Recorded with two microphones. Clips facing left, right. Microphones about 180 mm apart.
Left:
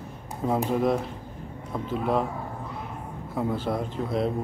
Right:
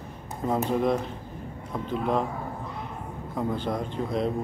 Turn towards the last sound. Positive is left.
turn(degrees=5)  # may be behind; listen again after turning